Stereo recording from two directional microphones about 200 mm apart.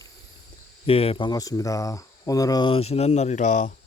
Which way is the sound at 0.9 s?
30° left (ahead or behind).